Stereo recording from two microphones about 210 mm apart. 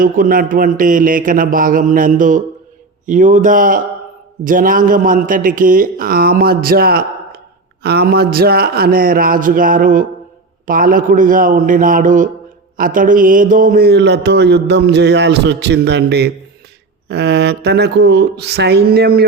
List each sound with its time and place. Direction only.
0.0 s a man's voice: 40° right (ahead or behind)